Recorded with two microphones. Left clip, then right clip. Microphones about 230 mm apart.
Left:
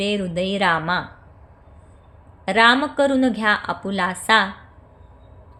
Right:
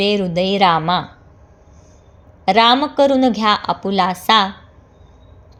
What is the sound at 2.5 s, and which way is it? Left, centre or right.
A woman's voice, centre.